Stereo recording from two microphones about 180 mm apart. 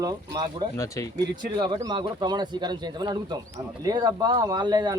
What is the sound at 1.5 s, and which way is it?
Speech, 25° right (ahead or behind).